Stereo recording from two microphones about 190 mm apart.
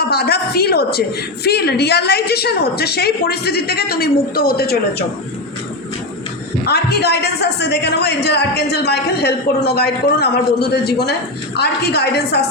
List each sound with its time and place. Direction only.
0.0 s a woman's voice: 55° left (ahead or behind)
6.7 s a woman's voice: 55° left (ahead or behind)